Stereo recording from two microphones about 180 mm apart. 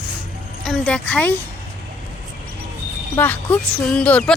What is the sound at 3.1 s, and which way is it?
Speech, 10° left (ahead or behind).